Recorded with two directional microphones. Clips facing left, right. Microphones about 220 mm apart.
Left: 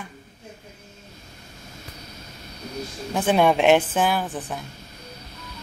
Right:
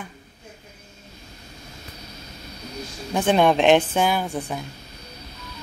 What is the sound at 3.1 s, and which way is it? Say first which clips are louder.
Speech: right 1 dB; 5° left (ahead or behind).